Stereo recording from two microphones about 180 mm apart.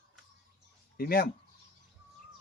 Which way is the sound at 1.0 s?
55° left (ahead or behind).